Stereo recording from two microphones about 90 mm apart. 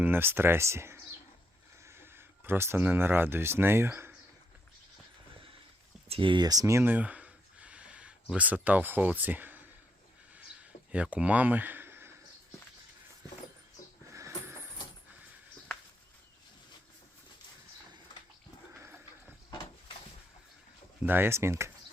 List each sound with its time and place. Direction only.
0.0 s speech: 25° right (ahead or behind)
6.1 s speech: 70° right (ahead or behind)
6.4 s speech: 40° right (ahead or behind)
6.8 s a sound: 20° right (ahead or behind)
10.9 s speech: 15° right (ahead or behind)
14.1 s a sound: 35° right (ahead or behind)
21.0 s speech: 25° right (ahead or behind)